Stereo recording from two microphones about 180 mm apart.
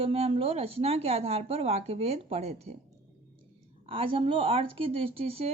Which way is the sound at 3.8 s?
30° right (ahead or behind).